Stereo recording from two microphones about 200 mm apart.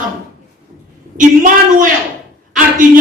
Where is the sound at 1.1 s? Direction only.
40° right (ahead or behind).